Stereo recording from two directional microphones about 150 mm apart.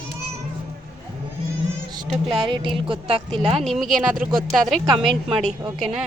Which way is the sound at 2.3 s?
35° right (ahead or behind).